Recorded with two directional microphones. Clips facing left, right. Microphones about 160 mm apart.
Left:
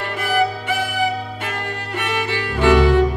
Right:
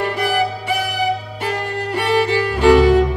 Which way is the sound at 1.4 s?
35° right (ahead or behind).